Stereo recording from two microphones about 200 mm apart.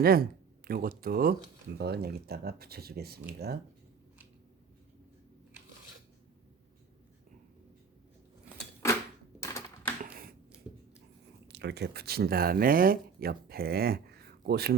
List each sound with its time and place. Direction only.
0.0 s speech: 50° right (ahead or behind)
9.4 s typewriter: 15° left (ahead or behind)
10.0 s a sound: 45° right (ahead or behind)
11.4 s speech: 55° right (ahead or behind)